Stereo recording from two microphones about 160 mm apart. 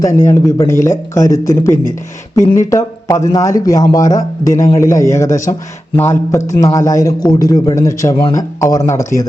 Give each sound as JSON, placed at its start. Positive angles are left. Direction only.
{"t": 0.0, "sound": "a man's voice", "side_deg": 20}